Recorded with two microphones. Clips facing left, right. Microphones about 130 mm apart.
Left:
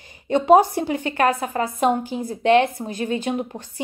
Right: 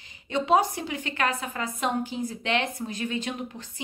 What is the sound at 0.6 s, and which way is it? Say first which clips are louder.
A woman's voice: left 8 dB; 35° left (ahead or behind).